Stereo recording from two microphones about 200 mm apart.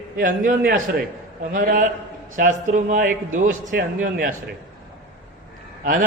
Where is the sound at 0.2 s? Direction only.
45° right (ahead or behind).